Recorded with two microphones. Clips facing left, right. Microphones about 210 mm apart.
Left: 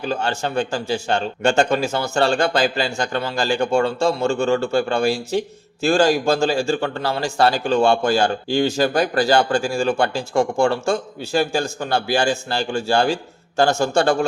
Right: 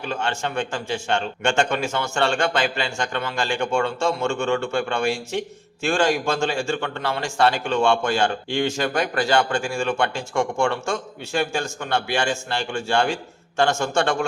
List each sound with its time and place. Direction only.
0.0 s a man's voice: 35° left (ahead or behind)